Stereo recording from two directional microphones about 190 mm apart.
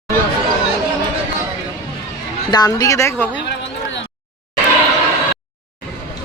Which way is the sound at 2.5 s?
20° left (ahead or behind).